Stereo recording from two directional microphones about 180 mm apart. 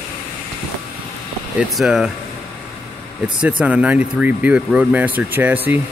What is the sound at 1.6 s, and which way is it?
Speech, centre (ahead or behind).